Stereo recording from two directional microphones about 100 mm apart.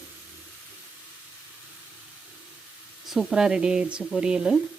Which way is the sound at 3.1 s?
5° right (ahead or behind).